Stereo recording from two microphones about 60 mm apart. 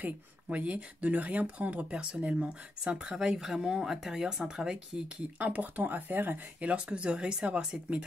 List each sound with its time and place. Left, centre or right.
0.0 s speech: right
6.6 s speech: centre